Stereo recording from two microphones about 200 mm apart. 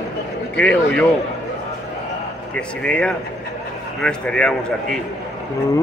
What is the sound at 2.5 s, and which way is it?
Speech, 5° left (ahead or behind).